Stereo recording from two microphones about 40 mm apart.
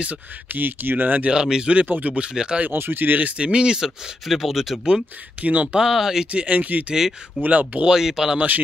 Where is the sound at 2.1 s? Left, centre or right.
Right.